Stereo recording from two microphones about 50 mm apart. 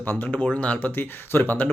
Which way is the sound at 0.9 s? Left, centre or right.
Left.